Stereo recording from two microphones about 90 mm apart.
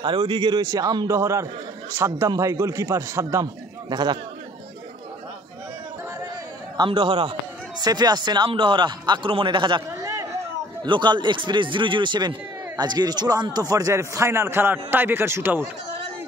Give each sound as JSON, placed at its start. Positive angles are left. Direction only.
{"t": 0.0, "sound": "a man's voice", "side_deg": -65}
{"t": 1.0, "sound": "a man's voice", "side_deg": -30}
{"t": 3.9, "sound": "a man's voice", "side_deg": -50}
{"t": 6.8, "sound": "a man's voice", "side_deg": -65}
{"t": 7.8, "sound": "a man's voice", "side_deg": -50}
{"t": 8.5, "sound": "a man's voice", "side_deg": -65}
{"t": 9.3, "sound": "a man's voice", "side_deg": -70}
{"t": 9.8, "sound": "a sound", "side_deg": -40}
{"t": 10.8, "sound": "a man's voice", "side_deg": -60}